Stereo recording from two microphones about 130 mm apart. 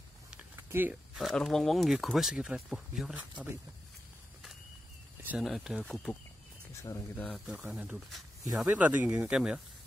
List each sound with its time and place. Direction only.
0.7 s speech: 15° right (ahead or behind)
1.1 s speech: centre (ahead or behind)
5.4 s speech: centre (ahead or behind)
6.7 s speech: 25° left (ahead or behind)
7.2 s speech: 10° left (ahead or behind)
7.4 s speech: 10° right (ahead or behind)